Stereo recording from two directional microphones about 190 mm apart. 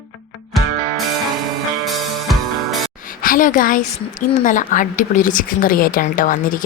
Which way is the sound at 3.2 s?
45° left (ahead or behind).